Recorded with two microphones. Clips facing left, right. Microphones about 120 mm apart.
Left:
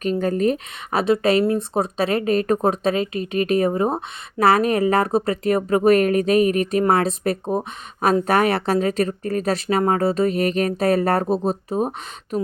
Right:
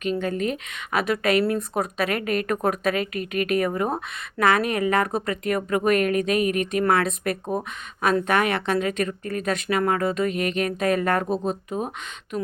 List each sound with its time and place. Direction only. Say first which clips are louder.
0.0 s speech: left 5 dB; 40° left (ahead or behind)